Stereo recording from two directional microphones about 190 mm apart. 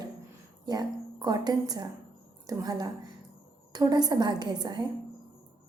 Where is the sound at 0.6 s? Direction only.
20° right (ahead or behind).